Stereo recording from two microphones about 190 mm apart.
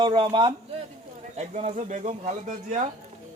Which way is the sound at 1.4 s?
35° right (ahead or behind).